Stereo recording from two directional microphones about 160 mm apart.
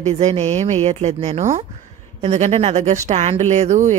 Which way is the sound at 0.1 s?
45° right (ahead or behind).